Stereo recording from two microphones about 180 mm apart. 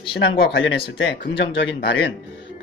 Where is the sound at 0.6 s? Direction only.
75° left (ahead or behind).